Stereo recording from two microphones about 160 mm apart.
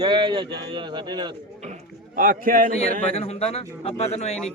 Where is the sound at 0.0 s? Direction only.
30° right (ahead or behind).